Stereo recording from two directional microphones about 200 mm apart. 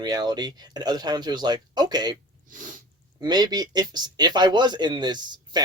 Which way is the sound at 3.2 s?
20° right (ahead or behind).